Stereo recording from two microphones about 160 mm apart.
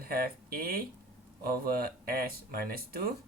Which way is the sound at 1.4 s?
65° right (ahead or behind).